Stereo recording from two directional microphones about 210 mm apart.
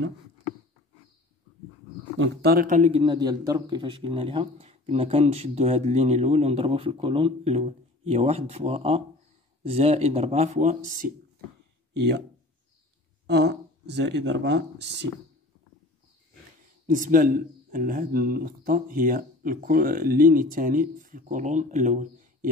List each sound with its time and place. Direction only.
2.1 s speech: 55° right (ahead or behind); by 11.1 s 35° right (ahead or behind)
13.3 s speech: 55° right (ahead or behind)
16.8 s speech: 40° right (ahead or behind)